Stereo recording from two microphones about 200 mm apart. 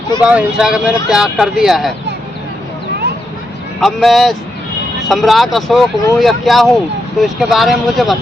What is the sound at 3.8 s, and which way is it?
Speech, centre (ahead or behind).